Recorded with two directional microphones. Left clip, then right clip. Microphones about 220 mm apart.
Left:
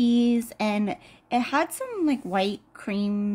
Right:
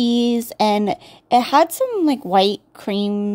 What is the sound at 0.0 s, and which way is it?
Speech, 30° right (ahead or behind).